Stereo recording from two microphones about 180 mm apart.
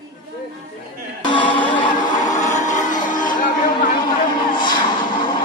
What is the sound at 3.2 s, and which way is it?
Music, 45° left (ahead or behind).